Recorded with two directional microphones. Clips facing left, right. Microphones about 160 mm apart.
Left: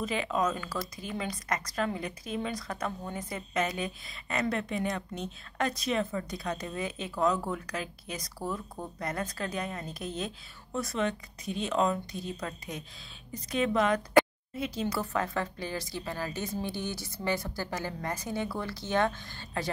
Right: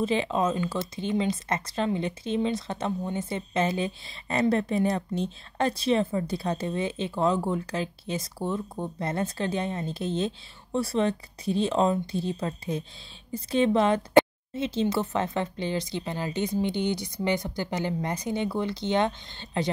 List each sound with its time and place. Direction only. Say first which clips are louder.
0.0 s speech: right 5 dB; 30° right (ahead or behind)